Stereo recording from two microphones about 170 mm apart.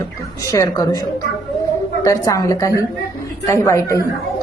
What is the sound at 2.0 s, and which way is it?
A woman's voice, 20° left (ahead or behind).